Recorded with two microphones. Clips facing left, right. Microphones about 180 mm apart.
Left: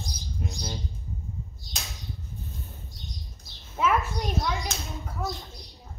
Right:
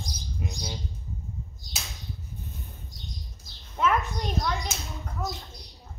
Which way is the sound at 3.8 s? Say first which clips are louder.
Even; 5° left (ahead or behind).